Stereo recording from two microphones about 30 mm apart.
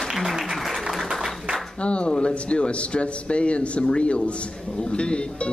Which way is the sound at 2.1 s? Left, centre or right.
Left.